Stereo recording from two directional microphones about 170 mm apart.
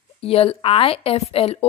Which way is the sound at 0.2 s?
35° left (ahead or behind).